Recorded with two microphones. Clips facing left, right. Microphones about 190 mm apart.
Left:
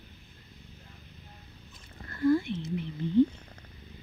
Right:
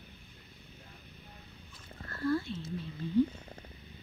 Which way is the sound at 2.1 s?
20° left (ahead or behind).